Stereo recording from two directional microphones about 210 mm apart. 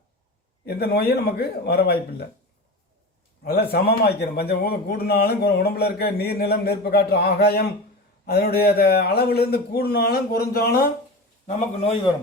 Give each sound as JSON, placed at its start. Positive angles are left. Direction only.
{"t": 0.6, "sound": "a man's voice", "side_deg": 50}
{"t": 3.4, "sound": "a man's voice", "side_deg": 50}